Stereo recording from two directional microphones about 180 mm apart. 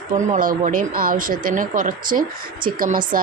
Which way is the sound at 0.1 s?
45° right (ahead or behind).